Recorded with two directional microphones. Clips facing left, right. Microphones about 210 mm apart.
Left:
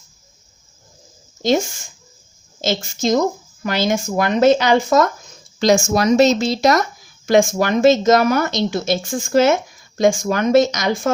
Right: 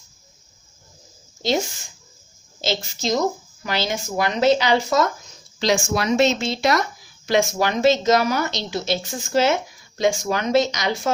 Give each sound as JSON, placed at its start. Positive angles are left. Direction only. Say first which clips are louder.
{"t": 2.6, "sound": "speech", "louder": "left 4 dB", "side_deg": 50}